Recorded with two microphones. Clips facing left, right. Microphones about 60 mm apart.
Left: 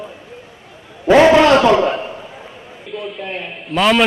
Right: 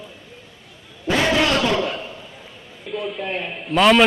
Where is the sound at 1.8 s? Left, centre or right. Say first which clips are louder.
Left 7 dB; left.